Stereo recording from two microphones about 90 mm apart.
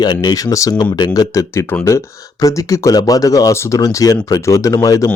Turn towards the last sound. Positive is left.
turn(degrees=40)  # may be behind; listen again after turning